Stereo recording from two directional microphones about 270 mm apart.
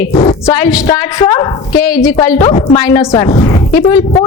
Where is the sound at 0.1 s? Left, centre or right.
Left.